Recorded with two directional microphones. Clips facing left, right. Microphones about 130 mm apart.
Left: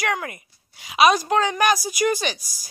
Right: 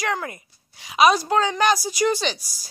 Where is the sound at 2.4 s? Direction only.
50° left (ahead or behind).